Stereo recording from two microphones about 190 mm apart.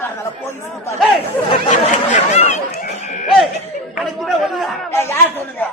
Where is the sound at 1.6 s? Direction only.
40° left (ahead or behind).